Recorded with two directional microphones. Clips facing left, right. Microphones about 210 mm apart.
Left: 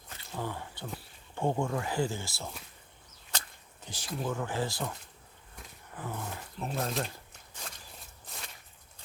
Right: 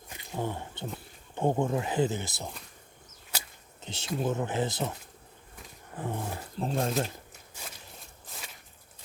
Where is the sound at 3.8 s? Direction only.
25° right (ahead or behind).